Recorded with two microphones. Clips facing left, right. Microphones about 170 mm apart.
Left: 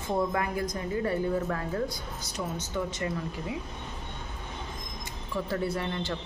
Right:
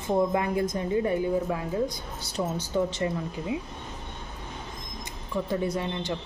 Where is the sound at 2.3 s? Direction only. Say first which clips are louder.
Right 6 dB; 30° right (ahead or behind).